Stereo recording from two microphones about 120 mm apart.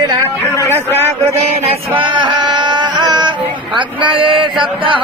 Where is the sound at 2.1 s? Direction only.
35° right (ahead or behind).